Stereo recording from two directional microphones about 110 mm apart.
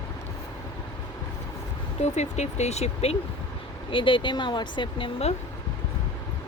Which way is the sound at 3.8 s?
50° left (ahead or behind).